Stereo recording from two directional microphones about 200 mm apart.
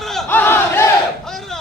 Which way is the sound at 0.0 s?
Centre (ahead or behind).